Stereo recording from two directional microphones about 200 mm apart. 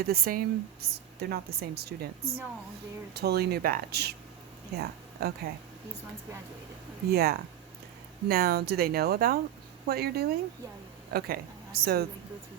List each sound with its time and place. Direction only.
0.0 s a woman's voice: 50° right (ahead or behind)
7.1 s a woman's voice: 50° right (ahead or behind)